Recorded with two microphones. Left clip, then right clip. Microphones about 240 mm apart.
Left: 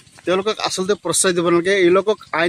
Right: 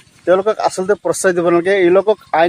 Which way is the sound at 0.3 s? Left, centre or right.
Left.